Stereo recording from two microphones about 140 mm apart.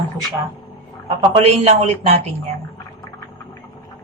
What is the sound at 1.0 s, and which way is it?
A man's voice, 45° right (ahead or behind).